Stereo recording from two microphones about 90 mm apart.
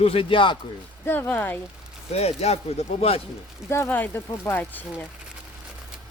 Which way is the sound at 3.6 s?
30° left (ahead or behind).